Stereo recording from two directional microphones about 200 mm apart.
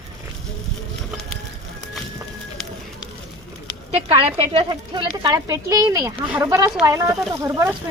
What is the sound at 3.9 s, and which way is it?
Speech, 30° right (ahead or behind).